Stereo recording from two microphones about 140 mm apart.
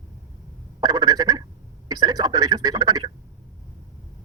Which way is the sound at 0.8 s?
30° right (ahead or behind).